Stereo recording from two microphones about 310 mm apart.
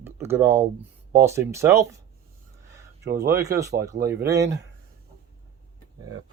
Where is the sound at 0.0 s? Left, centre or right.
Centre.